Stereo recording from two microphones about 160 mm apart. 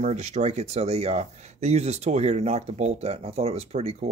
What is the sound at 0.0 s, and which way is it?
Speech, 45° right (ahead or behind).